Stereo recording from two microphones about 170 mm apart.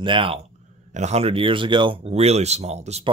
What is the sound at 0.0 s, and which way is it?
Speech, 30° right (ahead or behind).